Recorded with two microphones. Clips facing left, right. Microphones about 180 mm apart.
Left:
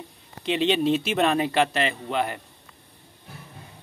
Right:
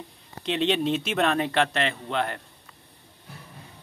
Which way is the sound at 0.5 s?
5° left (ahead or behind).